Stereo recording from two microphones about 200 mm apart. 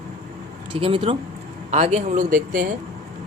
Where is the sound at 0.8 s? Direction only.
25° right (ahead or behind); by 2.6 s 45° right (ahead or behind).